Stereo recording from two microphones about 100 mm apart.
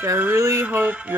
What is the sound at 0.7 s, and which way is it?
Music, 15° right (ahead or behind).